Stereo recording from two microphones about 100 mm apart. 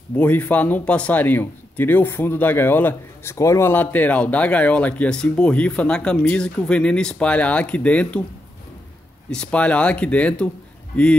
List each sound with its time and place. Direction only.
0.1 s speech: 15° left (ahead or behind)
3.3 s speech: 30° left (ahead or behind); by 8.2 s 15° left (ahead or behind)
9.3 s speech: 10° left (ahead or behind)